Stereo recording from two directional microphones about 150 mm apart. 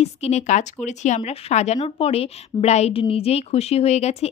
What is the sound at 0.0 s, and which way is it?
A woman's voice, 45° left (ahead or behind).